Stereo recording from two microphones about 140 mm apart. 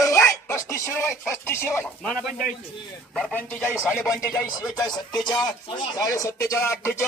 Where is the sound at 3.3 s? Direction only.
10° left (ahead or behind).